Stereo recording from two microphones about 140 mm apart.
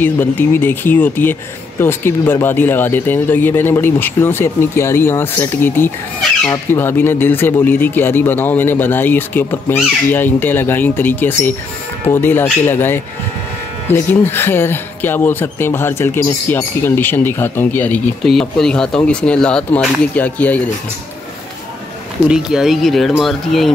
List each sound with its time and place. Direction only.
0.0 s speech: 15° left (ahead or behind)
22.3 s speech: 5° right (ahead or behind)